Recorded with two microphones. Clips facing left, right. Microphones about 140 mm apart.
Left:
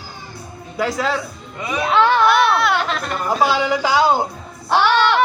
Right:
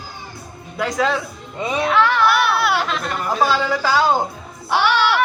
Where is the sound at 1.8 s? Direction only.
25° left (ahead or behind).